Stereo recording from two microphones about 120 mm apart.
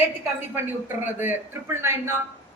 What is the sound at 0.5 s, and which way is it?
A man's voice, 20° right (ahead or behind).